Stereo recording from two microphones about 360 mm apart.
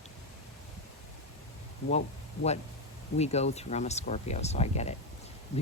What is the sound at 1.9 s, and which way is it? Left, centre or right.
Speech, centre.